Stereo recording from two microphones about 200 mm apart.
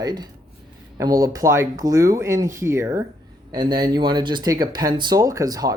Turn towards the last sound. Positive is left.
turn(degrees=-20)  # may be behind; listen again after turning